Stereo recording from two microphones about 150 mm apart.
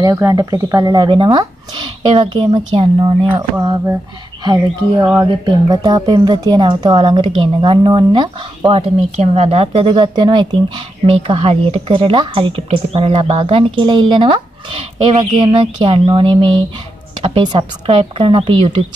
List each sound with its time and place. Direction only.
0.0 s speech: 25° right (ahead or behind)
3.3 s a sound: 20° right (ahead or behind)
5.4 s speech: 25° right (ahead or behind)
11.1 s speech: 40° right (ahead or behind)